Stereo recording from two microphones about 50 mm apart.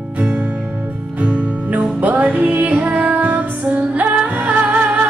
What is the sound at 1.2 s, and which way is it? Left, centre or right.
Music, right.